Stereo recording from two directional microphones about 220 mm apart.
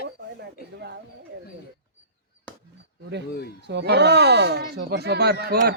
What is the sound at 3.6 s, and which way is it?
Speech, 50° right (ahead or behind).